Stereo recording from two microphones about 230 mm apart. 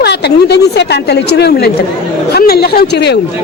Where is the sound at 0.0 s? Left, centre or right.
Left.